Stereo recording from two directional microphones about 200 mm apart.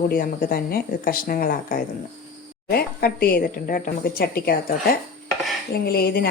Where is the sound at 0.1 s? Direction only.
45° left (ahead or behind).